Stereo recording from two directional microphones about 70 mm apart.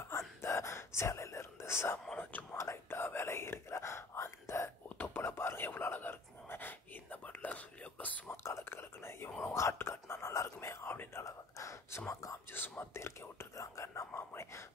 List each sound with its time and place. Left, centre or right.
0.4 s whispering: left
4.8 s whispering: left
5.2 s whispering: left
8.3 s whispering: left
12.5 s whispering: left